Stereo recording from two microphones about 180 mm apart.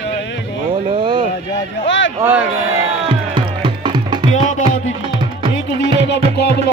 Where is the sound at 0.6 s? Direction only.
45° right (ahead or behind).